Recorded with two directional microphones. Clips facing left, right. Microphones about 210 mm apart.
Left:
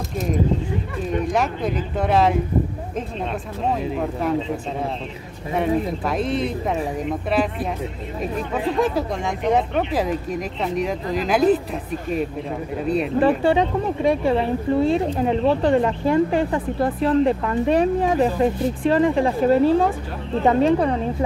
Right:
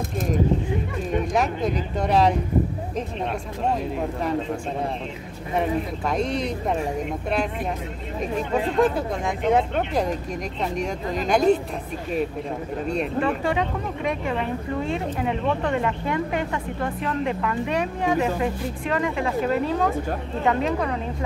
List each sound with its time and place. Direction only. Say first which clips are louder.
1.3 s speech: left 1 dB; centre (ahead or behind)
3.6 s speech: left 2 dB; centre (ahead or behind)
5.6 s speech: left 3 dB; centre (ahead or behind)
8.8 s speech: even; centre (ahead or behind)
12.8 s speech: left 5 dB; centre (ahead or behind)
13.2 s speech: left 8 dB; 35° left (ahead or behind)